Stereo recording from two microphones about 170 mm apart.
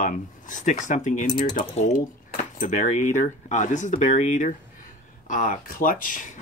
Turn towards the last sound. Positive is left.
turn(degrees=50)  # may be behind; listen again after turning